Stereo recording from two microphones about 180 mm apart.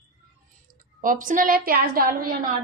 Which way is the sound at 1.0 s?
50° right (ahead or behind).